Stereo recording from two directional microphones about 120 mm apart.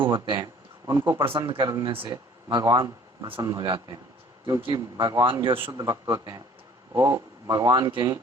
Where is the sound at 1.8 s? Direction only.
50° right (ahead or behind).